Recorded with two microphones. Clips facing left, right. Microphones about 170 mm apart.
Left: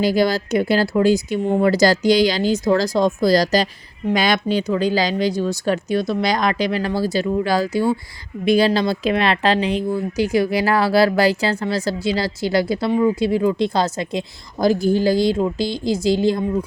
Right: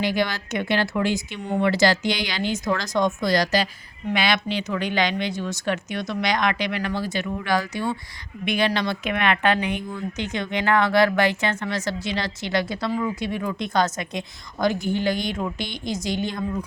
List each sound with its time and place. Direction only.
0.0 s speech: 35° left (ahead or behind)